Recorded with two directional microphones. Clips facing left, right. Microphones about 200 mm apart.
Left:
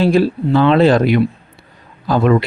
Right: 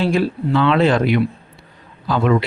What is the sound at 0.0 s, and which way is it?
Speech, 35° left (ahead or behind).